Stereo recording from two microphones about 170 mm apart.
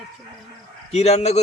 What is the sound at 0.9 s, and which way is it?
Speech, 40° left (ahead or behind).